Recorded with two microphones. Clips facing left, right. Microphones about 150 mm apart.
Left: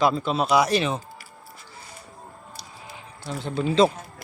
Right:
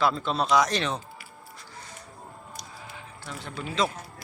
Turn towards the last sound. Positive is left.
turn(degrees=25)  # may be behind; listen again after turning